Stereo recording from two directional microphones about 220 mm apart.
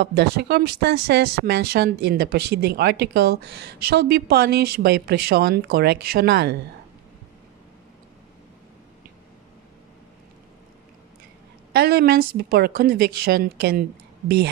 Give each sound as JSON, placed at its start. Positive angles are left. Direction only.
{"t": 0.0, "sound": "speech", "side_deg": -45}
{"t": 11.7, "sound": "speech", "side_deg": -45}